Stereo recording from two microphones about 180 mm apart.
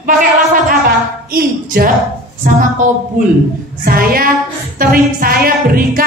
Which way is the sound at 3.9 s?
55° right (ahead or behind).